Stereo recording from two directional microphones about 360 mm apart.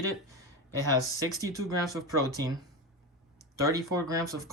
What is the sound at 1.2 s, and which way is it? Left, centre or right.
Speech, centre.